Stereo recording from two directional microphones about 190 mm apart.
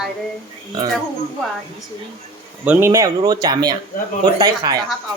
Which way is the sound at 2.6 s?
10° right (ahead or behind).